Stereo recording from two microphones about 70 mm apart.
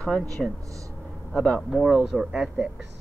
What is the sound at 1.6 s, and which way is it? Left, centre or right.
Speech, centre.